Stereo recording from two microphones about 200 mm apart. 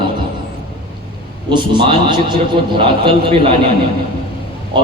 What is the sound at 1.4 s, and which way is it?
A man's voice, 25° right (ahead or behind).